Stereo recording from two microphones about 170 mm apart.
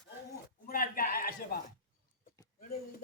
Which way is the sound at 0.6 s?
55° left (ahead or behind).